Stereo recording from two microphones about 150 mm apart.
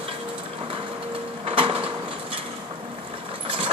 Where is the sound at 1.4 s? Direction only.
35° right (ahead or behind).